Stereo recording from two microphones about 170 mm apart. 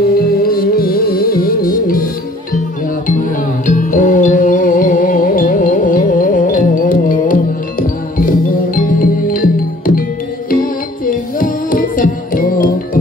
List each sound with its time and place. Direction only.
0.1 s music: 60° left (ahead or behind)
3.6 s music: 50° left (ahead or behind)